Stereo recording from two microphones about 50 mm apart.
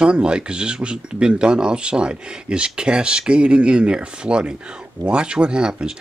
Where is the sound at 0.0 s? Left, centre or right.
Centre.